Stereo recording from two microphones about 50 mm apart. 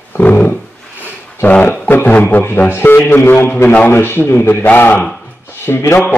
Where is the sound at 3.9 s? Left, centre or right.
Left.